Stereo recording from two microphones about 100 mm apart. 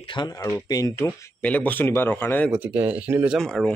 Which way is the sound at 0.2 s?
45° left (ahead or behind).